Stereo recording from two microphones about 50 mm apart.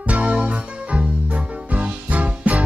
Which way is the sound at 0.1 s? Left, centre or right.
Right.